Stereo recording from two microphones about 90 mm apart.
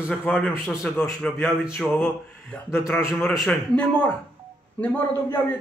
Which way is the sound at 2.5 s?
15° left (ahead or behind).